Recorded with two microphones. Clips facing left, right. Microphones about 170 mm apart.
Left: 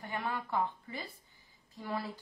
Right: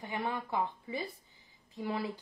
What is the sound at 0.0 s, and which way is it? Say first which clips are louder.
A woman's voice: right 1 dB; 20° right (ahead or behind).